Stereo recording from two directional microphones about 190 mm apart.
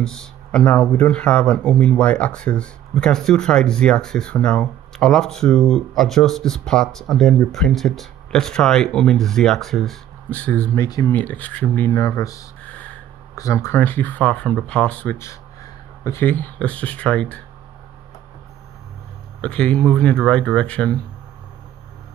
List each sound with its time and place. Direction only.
0.0 s speech: 5° left (ahead or behind)
12.2 s a sound: 15° left (ahead or behind)
13.4 s speech: 15° left (ahead or behind)
19.4 s speech: 5° left (ahead or behind)